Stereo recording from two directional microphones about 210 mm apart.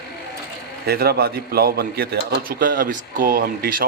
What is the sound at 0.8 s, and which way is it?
A man's voice, 50° right (ahead or behind).